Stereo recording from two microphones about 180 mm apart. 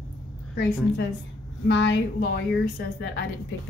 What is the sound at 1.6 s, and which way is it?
Speech, 75° left (ahead or behind).